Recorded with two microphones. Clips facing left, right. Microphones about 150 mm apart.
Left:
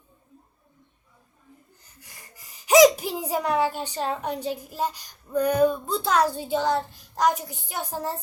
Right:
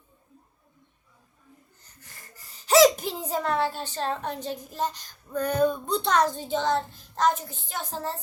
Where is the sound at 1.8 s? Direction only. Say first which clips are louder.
Right 1 dB; 10° left (ahead or behind).